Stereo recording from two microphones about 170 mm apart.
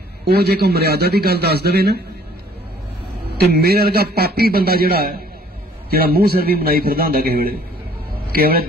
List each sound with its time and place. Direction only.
0.2 s a man's voice: 70° right (ahead or behind)
3.3 s a man's voice: 70° right (ahead or behind)